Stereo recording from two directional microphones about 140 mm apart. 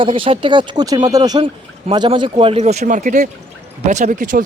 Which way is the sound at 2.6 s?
55° right (ahead or behind).